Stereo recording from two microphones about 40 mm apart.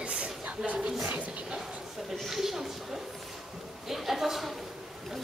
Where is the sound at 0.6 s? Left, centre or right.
Right.